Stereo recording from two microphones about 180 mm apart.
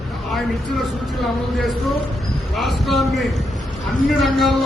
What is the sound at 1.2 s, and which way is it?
Speech, centre (ahead or behind).